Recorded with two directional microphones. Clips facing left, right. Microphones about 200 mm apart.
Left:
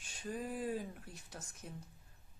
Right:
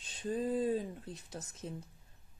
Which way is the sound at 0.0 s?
20° right (ahead or behind).